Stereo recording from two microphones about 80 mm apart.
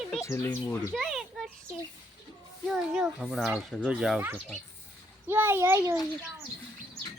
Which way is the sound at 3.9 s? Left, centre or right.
Centre.